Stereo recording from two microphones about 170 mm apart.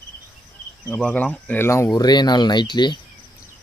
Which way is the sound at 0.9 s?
5° left (ahead or behind).